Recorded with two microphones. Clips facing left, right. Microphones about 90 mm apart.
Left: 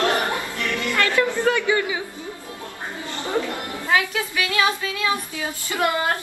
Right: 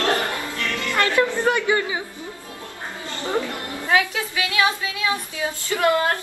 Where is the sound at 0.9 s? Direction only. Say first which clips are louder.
Right 2 dB; 20° right (ahead or behind).